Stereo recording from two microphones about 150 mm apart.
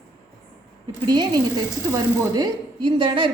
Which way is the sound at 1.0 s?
30° right (ahead or behind).